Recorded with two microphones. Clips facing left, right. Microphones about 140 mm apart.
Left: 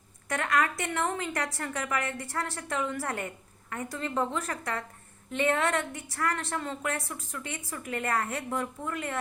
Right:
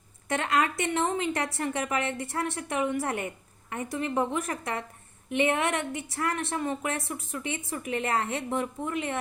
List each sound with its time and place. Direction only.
0.3 s a woman's voice: 25° right (ahead or behind)